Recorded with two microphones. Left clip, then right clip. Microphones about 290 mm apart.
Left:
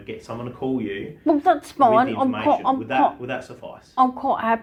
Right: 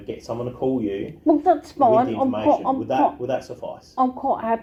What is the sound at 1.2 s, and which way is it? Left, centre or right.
A woman's voice, left.